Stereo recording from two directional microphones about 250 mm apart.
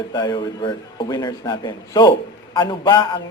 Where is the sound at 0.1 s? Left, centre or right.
Centre.